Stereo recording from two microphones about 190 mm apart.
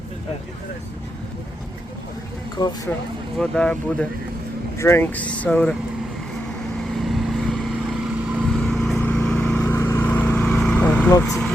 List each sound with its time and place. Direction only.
2.6 s speech: 20° left (ahead or behind)
3.3 s speech: 5° left (ahead or behind)
6.8 s vehicle: centre (ahead or behind)
11.2 s speech: centre (ahead or behind)